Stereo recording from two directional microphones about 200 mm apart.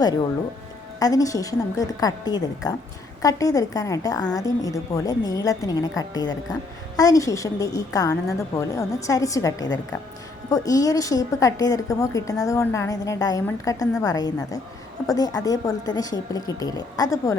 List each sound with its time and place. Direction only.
0.9 s a woman's voice: 20° left (ahead or behind)